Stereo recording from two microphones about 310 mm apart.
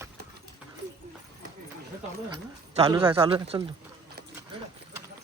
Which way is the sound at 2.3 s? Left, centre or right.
Centre.